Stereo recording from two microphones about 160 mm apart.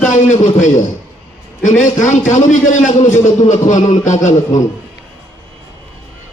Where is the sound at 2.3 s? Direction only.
50° left (ahead or behind).